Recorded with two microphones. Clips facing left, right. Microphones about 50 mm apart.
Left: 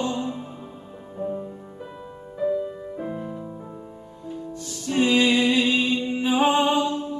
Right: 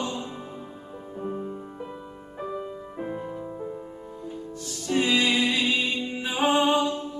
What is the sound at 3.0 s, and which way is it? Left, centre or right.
Music, centre.